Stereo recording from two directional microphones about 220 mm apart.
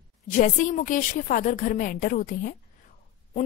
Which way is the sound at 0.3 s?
35° left (ahead or behind).